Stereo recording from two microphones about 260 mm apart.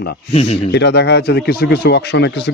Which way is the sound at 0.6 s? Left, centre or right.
Left.